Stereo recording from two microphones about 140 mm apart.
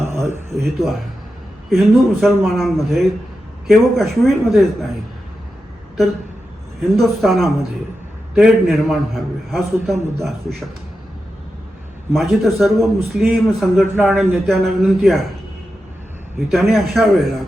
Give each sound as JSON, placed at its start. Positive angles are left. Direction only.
{"t": 0.0, "sound": "a sound", "side_deg": -20}
{"t": 0.5, "sound": "a man's voice", "side_deg": 0}
{"t": 6.9, "sound": "a man's voice", "side_deg": 0}
{"t": 12.1, "sound": "a man's voice", "side_deg": 0}
{"t": 14.0, "sound": "a man's voice", "side_deg": -15}
{"t": 14.3, "sound": "a man's voice", "side_deg": 0}
{"t": 16.5, "sound": "a man's voice", "side_deg": 0}